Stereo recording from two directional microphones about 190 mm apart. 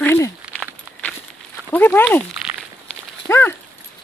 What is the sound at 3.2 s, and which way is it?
Dog, 10° left (ahead or behind).